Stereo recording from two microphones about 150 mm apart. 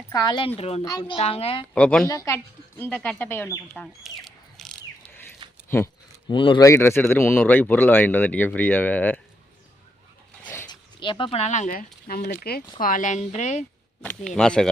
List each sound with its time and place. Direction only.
0.1 s a child's voice: 25° left (ahead or behind)
0.9 s a child's voice: 30° left (ahead or behind)
1.7 s speech: 5° left (ahead or behind)
2.0 s speech: 20° left (ahead or behind)
4.0 s bird: centre (ahead or behind)
5.6 s speech: 15° left (ahead or behind)
6.2 s a child's voice: 35° left (ahead or behind)
6.7 s speech: 15° left (ahead or behind)
10.4 s dog: 15° left (ahead or behind)
10.7 s speech: 30° left (ahead or behind); by 11.9 s 55° left (ahead or behind)
12.0 s speech: 85° left
12.8 s a woman's voice: 60° left (ahead or behind)
14.3 s speech: 5° left (ahead or behind)